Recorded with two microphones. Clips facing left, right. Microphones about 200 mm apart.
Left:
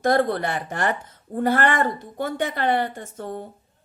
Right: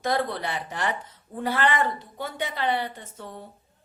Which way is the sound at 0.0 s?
50° left (ahead or behind).